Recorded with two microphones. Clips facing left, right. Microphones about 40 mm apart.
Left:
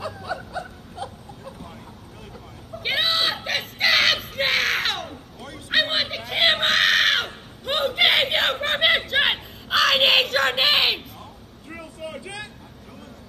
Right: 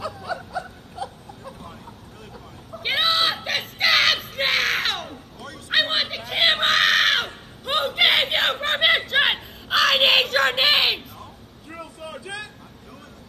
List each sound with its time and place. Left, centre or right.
0.0 s snicker: left
2.8 s crowd: centre
5.7 s screaming: centre